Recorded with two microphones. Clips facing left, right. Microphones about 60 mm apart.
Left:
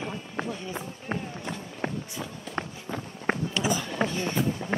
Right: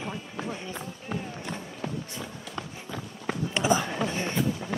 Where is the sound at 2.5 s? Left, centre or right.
Left.